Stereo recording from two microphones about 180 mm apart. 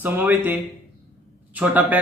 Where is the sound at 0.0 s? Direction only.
10° right (ahead or behind).